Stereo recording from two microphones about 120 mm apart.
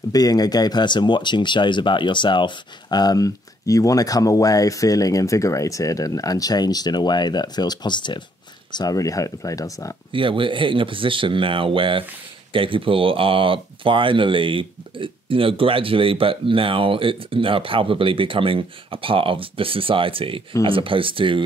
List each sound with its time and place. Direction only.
0.1 s speech: 30° left (ahead or behind)
10.1 s speech: 45° right (ahead or behind)